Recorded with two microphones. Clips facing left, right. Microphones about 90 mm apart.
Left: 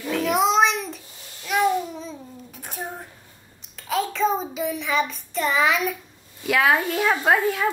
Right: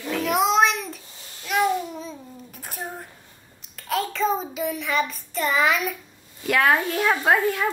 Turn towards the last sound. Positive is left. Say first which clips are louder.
# even
turn(degrees=0)  # may be behind; listen again after turning